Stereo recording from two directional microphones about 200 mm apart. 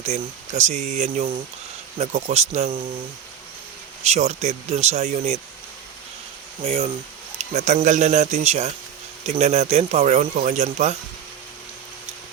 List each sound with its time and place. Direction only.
0.0 s speech: 35° right (ahead or behind)
4.0 s speech: 35° right (ahead or behind)
6.7 s speech: 30° right (ahead or behind)